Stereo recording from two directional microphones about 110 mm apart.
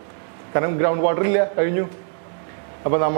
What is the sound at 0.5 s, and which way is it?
A man's voice, 20° right (ahead or behind).